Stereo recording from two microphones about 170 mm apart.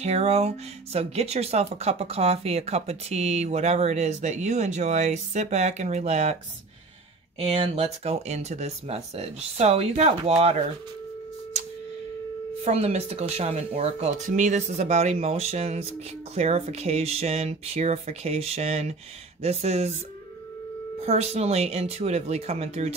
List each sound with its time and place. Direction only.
0.0 s speech: 40° right (ahead or behind)
7.3 s speech: 35° right (ahead or behind)
12.6 s speech: 40° right (ahead or behind)
21.0 s speech: 40° right (ahead or behind)